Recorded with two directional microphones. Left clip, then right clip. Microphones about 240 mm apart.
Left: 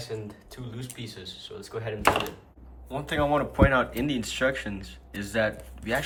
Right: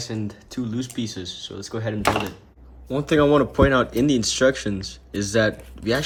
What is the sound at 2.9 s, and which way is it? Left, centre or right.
Speech, centre.